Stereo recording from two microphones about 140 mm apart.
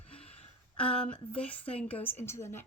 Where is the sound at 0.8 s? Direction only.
10° left (ahead or behind).